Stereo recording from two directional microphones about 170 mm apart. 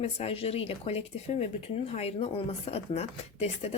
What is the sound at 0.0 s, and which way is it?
Speech, 40° left (ahead or behind).